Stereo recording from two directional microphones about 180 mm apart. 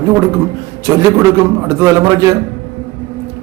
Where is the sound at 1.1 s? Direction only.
15° right (ahead or behind).